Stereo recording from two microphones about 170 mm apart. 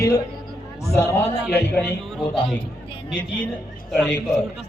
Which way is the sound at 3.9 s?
Centre (ahead or behind).